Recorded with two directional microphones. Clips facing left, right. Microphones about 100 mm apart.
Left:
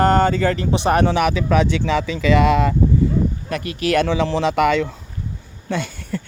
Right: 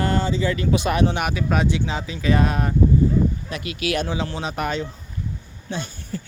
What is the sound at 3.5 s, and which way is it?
Speech, 40° left (ahead or behind).